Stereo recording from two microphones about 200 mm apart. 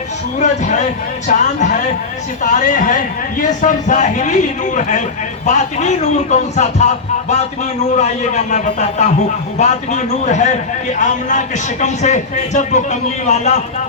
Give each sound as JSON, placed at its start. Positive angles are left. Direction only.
{"t": 0.3, "sound": "speech", "side_deg": 35}